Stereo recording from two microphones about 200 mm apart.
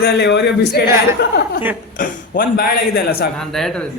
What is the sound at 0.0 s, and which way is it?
A man's voice, 55° left (ahead or behind).